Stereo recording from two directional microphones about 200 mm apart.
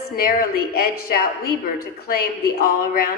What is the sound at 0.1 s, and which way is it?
A woman's voice, 45° left (ahead or behind).